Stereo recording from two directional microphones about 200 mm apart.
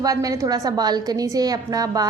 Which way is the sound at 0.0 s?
15° right (ahead or behind).